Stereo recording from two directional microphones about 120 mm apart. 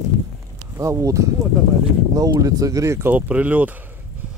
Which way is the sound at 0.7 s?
25° right (ahead or behind).